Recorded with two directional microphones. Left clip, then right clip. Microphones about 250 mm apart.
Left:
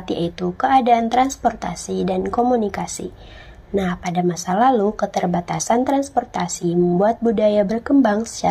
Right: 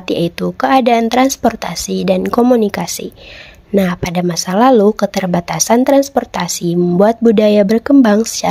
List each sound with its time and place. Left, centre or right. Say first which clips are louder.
0.1 s speech: right 7 dB; right